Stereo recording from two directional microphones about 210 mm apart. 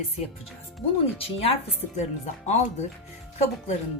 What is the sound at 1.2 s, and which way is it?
Speech, 25° left (ahead or behind).